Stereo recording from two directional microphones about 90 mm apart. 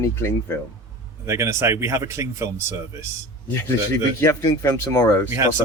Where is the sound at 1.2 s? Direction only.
35° right (ahead or behind).